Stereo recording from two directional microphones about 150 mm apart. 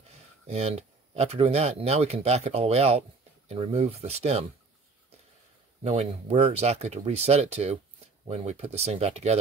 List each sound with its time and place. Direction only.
0.5 s speech: 45° right (ahead or behind)
5.9 s speech: 50° right (ahead or behind)